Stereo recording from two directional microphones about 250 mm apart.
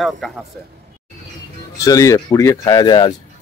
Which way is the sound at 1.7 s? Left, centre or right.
Centre.